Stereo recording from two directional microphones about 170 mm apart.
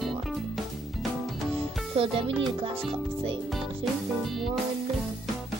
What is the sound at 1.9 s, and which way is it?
Speech, 35° right (ahead or behind).